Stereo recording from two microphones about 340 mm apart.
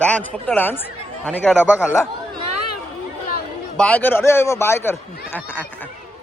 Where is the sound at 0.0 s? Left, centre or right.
Centre.